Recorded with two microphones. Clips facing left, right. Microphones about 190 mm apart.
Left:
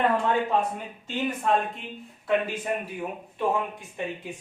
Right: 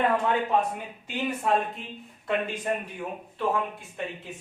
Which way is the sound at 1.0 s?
5° right (ahead or behind).